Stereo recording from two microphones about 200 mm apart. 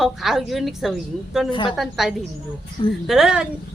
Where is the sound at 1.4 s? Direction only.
25° left (ahead or behind).